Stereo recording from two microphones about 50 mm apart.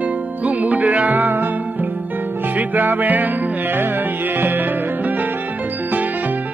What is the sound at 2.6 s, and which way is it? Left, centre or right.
Music, right.